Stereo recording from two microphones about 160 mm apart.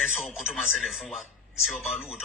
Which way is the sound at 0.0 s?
Centre (ahead or behind).